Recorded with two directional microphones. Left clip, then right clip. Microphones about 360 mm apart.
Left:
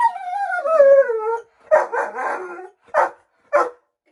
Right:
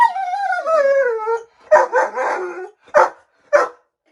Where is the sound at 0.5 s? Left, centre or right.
Centre.